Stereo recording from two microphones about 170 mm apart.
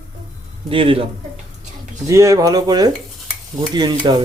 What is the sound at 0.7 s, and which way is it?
Speech, 30° right (ahead or behind).